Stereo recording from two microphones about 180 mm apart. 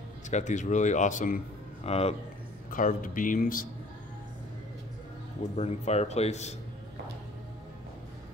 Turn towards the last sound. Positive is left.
turn(degrees=40)  # may be behind; listen again after turning